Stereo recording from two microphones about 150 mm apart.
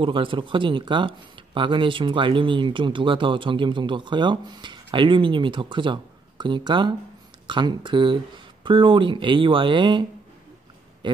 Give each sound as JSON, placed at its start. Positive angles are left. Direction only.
{"t": 0.0, "sound": "speech", "side_deg": -35}